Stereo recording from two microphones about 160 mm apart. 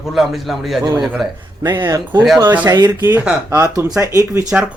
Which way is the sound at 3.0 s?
10° right (ahead or behind).